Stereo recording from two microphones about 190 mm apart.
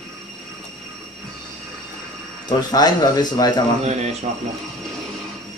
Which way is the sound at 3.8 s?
35° right (ahead or behind).